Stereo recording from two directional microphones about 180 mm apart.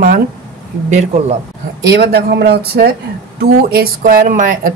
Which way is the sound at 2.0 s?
60° right (ahead or behind).